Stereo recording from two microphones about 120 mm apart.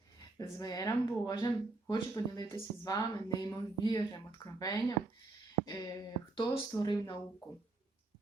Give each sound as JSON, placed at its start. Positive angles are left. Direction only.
{"t": 0.3, "sound": "speech", "side_deg": 30}